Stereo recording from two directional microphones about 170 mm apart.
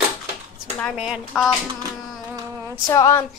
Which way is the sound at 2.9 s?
20° left (ahead or behind).